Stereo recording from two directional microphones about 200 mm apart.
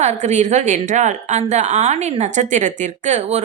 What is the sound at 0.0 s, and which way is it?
A woman's voice, 35° right (ahead or behind).